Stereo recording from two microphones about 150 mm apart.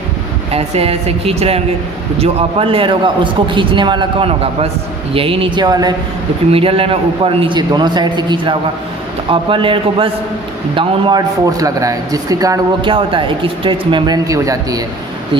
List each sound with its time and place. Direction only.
0.5 s speech: 40° right (ahead or behind)
6.5 s speech: 40° right (ahead or behind)
11.6 s speech: 20° right (ahead or behind)
14.3 s speech: 20° right (ahead or behind)